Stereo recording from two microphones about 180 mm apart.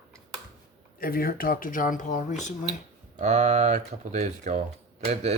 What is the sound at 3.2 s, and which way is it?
Speech, 40° right (ahead or behind).